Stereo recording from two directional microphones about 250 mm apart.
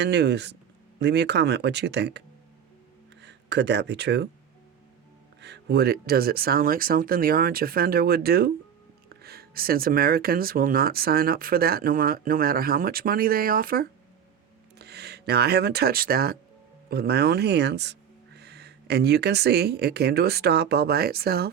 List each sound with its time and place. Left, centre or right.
0.0 s speech: right
5.4 s speech: right